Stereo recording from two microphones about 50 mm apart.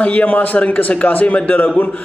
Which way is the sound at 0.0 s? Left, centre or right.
Left.